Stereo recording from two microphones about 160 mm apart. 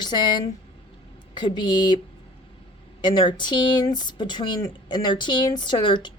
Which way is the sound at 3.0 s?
30° left (ahead or behind).